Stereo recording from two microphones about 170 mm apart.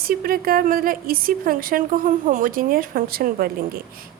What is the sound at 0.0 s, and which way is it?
A woman's voice, 60° right (ahead or behind).